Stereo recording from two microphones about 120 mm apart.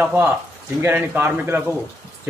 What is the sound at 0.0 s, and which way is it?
A man's voice, 15° right (ahead or behind).